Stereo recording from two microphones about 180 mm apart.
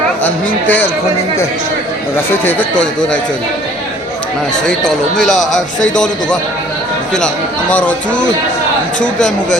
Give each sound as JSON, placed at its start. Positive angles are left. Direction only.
{"t": 0.3, "sound": "speech", "side_deg": 10}
{"t": 2.3, "sound": "speech", "side_deg": 10}
{"t": 4.6, "sound": "speech", "side_deg": 5}
{"t": 7.7, "sound": "speech", "side_deg": 10}